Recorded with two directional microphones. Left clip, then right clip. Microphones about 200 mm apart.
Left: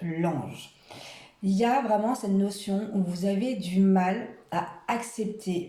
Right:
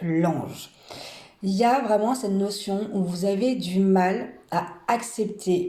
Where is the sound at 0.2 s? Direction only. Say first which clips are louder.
Right 3 dB; 35° right (ahead or behind).